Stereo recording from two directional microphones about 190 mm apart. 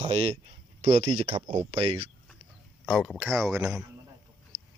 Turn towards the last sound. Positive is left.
turn(degrees=-5)  # may be behind; listen again after turning